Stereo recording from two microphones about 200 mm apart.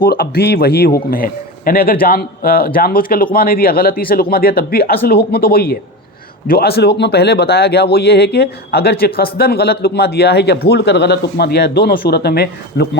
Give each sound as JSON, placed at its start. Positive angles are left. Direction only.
{"t": 0.0, "sound": "speech", "side_deg": 50}